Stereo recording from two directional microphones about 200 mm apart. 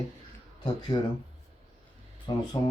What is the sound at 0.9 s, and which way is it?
Speech, 20° left (ahead or behind).